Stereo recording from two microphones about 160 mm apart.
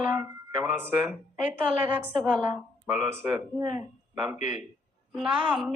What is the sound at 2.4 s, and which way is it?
Speech, 10° right (ahead or behind).